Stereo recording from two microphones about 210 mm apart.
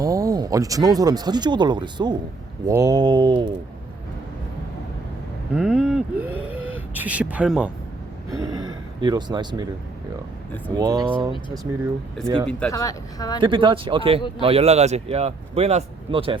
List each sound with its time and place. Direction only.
0.0 s speech: 15° right (ahead or behind)
5.5 s speech: 5° right (ahead or behind)
8.3 s a sound: 20° right (ahead or behind)
10.8 s speech: 20° right (ahead or behind)
12.5 s speech: 5° left (ahead or behind)
12.7 s speech: 15° left (ahead or behind)
13.4 s speech: 25° right (ahead or behind)